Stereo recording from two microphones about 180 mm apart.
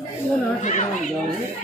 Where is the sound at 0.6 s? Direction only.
40° left (ahead or behind).